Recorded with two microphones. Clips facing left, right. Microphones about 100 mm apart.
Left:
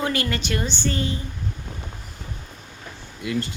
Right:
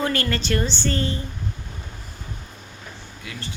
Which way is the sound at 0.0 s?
10° left (ahead or behind).